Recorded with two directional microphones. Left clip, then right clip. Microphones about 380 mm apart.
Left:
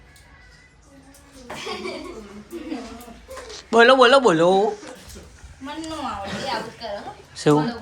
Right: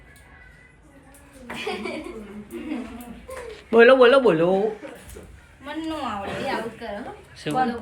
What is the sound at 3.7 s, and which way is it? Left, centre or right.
Speech, centre.